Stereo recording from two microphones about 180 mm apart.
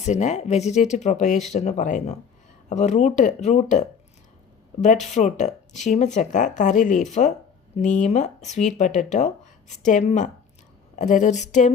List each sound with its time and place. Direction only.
0.0 s speech: 40° left (ahead or behind)
5.1 s speech: 40° left (ahead or behind)